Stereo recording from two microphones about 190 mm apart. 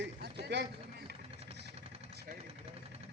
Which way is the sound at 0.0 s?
60° right (ahead or behind).